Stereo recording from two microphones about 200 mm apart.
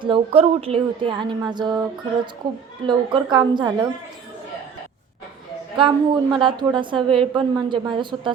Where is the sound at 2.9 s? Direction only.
20° right (ahead or behind).